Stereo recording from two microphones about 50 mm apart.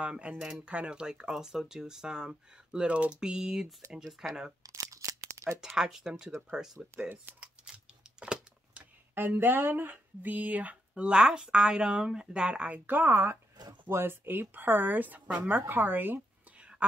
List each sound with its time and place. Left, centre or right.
0.0 s speech: right
4.9 s tearing: right
5.8 s speech: centre
7.6 s a sound: centre
9.1 s speech: right
12.8 s speech: right